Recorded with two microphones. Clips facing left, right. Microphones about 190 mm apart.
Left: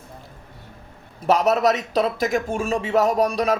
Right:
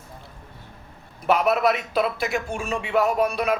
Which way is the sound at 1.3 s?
35° left (ahead or behind).